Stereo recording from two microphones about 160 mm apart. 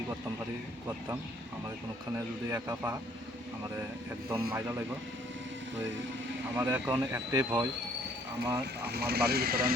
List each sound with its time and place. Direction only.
2.1 s a man's voice: 20° right (ahead or behind)
4.3 s speech: 15° right (ahead or behind)
6.6 s speech: 10° right (ahead or behind)
8.4 s speech: 10° right (ahead or behind)
8.9 s speech: 80° right